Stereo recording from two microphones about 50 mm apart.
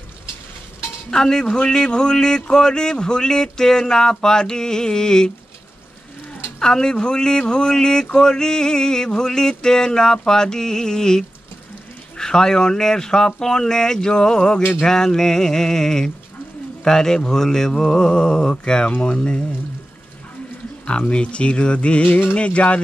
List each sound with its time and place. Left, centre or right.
1.1 s speech: centre
6.6 s speech: centre
21.0 s speech: left